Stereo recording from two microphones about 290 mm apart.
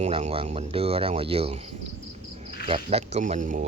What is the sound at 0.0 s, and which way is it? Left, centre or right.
Speech, right.